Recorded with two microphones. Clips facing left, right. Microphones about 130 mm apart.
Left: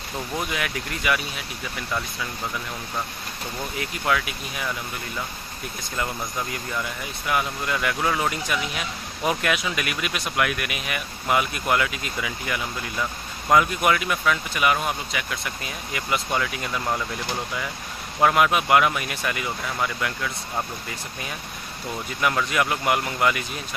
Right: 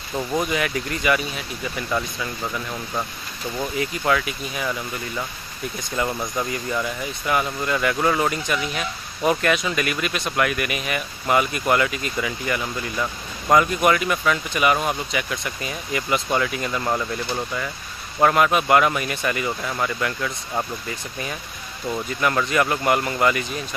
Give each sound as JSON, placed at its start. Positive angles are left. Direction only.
{"t": 0.4, "sound": "speech", "side_deg": 0}
{"t": 3.7, "sound": "speech", "side_deg": 0}
{"t": 6.5, "sound": "speech", "side_deg": 0}
{"t": 18.2, "sound": "speech", "side_deg": 5}
{"t": 22.5, "sound": "speech", "side_deg": 5}